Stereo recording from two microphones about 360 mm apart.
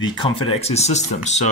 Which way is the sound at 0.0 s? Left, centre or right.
Centre.